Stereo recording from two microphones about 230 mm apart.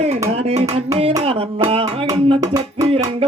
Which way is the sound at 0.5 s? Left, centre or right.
Right.